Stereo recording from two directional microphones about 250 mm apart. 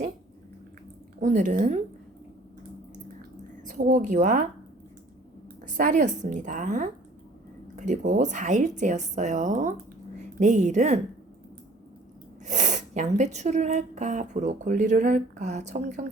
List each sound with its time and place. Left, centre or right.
1.2 s speech: right
3.2 s drip: right
5.6 s a woman's voice: right
12.5 s speech: right